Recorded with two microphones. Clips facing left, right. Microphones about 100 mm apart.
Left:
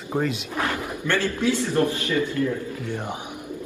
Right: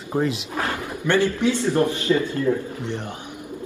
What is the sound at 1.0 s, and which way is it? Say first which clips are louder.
A man's voice: right 4 dB; 20° right (ahead or behind).